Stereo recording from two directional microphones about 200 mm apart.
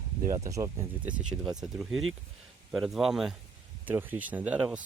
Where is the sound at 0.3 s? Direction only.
15° right (ahead or behind).